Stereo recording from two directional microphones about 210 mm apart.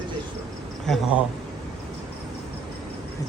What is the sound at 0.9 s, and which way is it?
Speech, centre (ahead or behind).